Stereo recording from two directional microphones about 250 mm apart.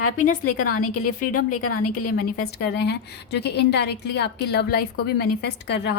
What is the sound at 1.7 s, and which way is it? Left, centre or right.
A woman's voice, left.